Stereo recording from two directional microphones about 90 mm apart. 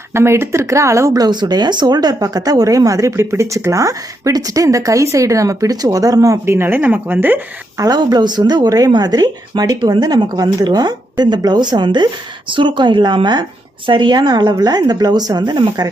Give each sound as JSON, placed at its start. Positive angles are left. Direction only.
{"t": 0.1, "sound": "speech", "side_deg": -30}
{"t": 6.4, "sound": "a woman's voice", "side_deg": -25}
{"t": 7.8, "sound": "speech", "side_deg": -50}